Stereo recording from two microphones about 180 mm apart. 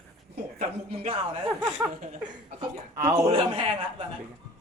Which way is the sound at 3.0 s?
15° right (ahead or behind).